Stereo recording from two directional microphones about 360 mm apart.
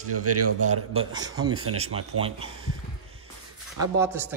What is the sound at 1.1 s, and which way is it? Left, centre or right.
A man's voice, centre.